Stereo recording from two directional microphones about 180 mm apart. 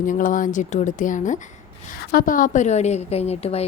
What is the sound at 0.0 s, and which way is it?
A woman's voice, 45° left (ahead or behind).